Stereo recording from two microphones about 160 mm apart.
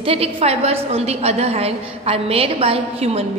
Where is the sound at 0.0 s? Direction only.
35° right (ahead or behind).